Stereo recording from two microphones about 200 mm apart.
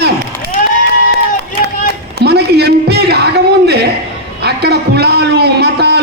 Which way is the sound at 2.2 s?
55° right (ahead or behind).